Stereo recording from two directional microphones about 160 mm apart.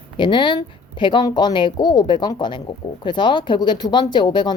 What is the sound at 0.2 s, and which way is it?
A woman's voice, 30° left (ahead or behind).